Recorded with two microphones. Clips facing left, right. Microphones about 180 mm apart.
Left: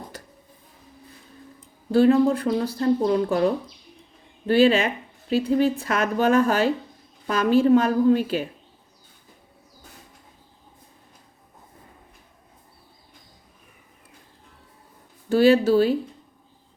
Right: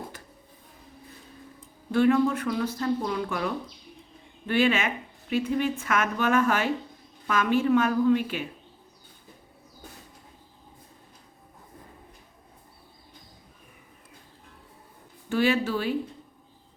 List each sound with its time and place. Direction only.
1.9 s a woman's voice: 35° left (ahead or behind)
15.3 s a woman's voice: 35° left (ahead or behind)